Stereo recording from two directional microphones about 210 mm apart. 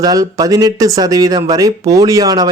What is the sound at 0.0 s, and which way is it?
A man's voice, 15° right (ahead or behind).